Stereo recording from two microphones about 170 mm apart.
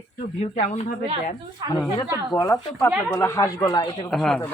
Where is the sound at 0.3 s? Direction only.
45° left (ahead or behind).